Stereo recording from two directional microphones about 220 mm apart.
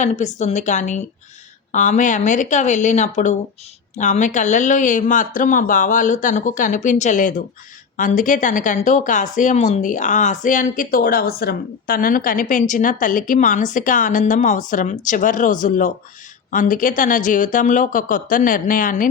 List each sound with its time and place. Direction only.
0.0 s speech: 30° left (ahead or behind)